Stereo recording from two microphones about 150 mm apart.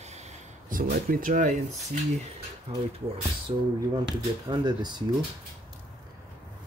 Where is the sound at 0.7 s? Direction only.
70° right (ahead or behind).